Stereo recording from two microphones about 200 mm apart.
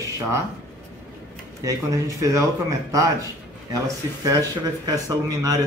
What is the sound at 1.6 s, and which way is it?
Speech, 15° right (ahead or behind).